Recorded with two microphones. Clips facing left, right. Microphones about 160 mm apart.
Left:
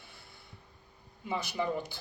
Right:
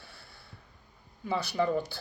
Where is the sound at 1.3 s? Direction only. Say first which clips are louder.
Right 4 dB; 15° left (ahead or behind).